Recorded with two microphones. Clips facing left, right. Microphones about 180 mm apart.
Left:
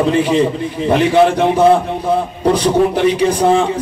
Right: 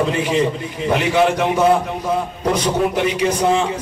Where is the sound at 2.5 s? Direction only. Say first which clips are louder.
Left 4 dB; 35° left (ahead or behind).